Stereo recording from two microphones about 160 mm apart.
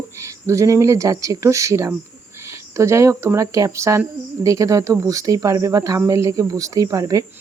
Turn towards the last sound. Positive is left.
turn(degrees=-20)  # may be behind; listen again after turning